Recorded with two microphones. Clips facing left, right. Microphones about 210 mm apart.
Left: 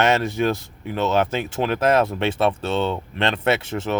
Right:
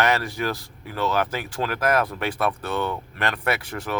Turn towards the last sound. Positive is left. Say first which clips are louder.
# left 5 dB
turn(degrees=25)  # may be behind; listen again after turning